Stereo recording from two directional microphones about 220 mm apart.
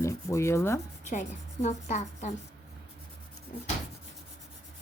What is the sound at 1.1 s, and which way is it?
A woman's voice, 30° left (ahead or behind).